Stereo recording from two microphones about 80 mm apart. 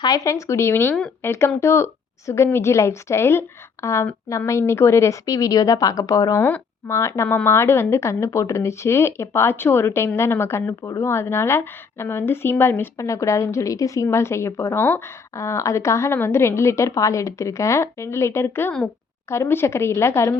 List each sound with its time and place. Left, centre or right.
0.0 s speech: left
6.3 s speech: left
13.0 s speech: left